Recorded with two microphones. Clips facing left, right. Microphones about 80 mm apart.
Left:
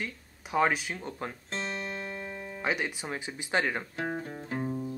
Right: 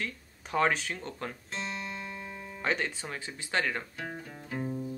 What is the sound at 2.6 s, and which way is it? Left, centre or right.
Speech, centre.